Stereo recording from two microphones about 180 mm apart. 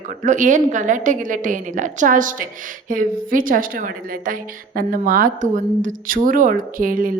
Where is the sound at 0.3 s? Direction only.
45° right (ahead or behind).